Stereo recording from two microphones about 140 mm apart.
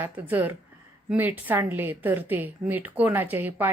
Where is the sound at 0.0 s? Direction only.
15° right (ahead or behind).